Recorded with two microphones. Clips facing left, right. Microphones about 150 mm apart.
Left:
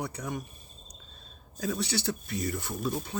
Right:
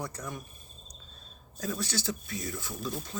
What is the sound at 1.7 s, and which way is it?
Speech, 65° left (ahead or behind).